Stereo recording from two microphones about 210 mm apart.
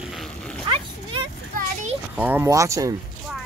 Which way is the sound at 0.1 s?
5° left (ahead or behind).